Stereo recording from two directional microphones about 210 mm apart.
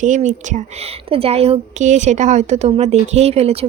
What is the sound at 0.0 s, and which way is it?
Speech, 35° right (ahead or behind).